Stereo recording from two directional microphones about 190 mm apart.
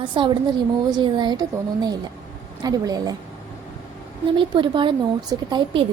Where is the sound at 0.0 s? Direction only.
25° right (ahead or behind).